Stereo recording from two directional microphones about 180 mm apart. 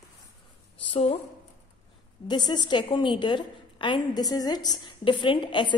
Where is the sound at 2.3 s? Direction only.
25° left (ahead or behind).